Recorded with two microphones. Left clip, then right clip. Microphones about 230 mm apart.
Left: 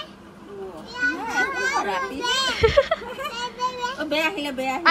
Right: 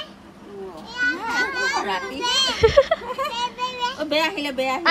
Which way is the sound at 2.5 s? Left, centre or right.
Centre.